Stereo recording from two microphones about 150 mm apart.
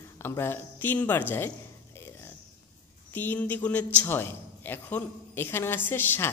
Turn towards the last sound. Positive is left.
turn(degrees=15)  # may be behind; listen again after turning